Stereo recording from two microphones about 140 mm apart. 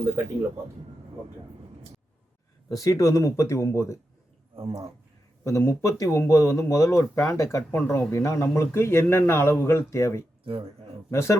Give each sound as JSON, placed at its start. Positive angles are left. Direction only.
{"t": 2.6, "sound": "speech", "side_deg": 25}
{"t": 4.5, "sound": "speech", "side_deg": -40}
{"t": 5.4, "sound": "speech", "side_deg": 20}